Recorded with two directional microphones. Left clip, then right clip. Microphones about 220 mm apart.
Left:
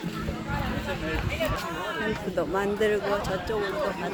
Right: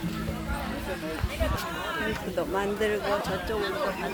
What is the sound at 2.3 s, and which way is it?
Speech, 5° left (ahead or behind).